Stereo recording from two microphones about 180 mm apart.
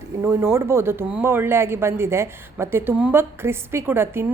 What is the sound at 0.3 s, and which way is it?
Speech, 15° right (ahead or behind).